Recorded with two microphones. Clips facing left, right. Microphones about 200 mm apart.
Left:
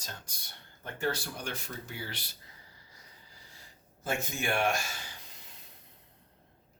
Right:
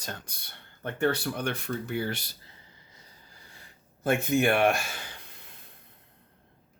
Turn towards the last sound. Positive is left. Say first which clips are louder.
# right 4 dB
turn(degrees=-55)  # may be behind; listen again after turning